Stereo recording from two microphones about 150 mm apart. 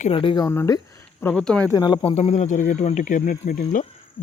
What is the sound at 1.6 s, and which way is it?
Speech, 25° left (ahead or behind).